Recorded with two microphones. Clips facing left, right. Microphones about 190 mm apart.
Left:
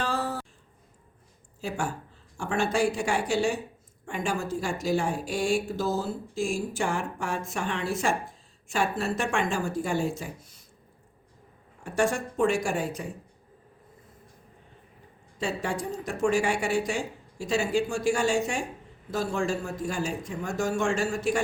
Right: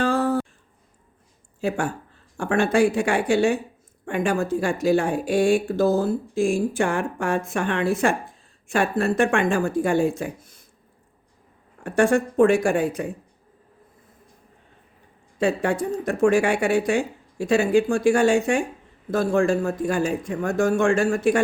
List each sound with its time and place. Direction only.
0.0 s a sound: 50° right (ahead or behind)
1.6 s speech: 60° right (ahead or behind)
11.8 s speech: 55° right (ahead or behind)
15.4 s speech: 55° right (ahead or behind)